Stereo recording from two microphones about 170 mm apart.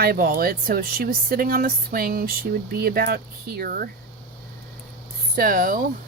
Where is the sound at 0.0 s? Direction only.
60° right (ahead or behind).